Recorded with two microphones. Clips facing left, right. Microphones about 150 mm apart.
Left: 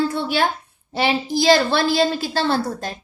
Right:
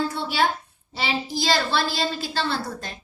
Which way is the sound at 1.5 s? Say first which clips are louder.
Left 7 dB; 55° left (ahead or behind).